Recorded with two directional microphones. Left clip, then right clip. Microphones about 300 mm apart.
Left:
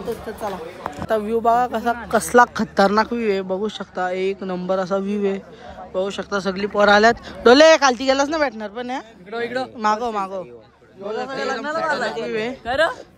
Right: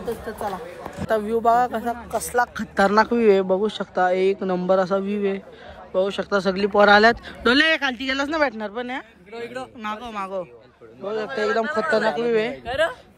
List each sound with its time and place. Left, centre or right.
1.0 s speech: centre
2.0 s speech: left
2.6 s speech: centre
9.3 s speech: left
11.3 s speech: centre
12.6 s a woman's voice: left